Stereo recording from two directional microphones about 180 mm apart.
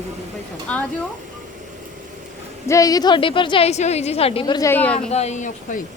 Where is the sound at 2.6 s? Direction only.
15° left (ahead or behind).